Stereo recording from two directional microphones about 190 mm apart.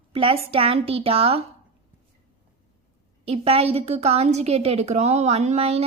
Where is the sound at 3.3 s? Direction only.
30° right (ahead or behind).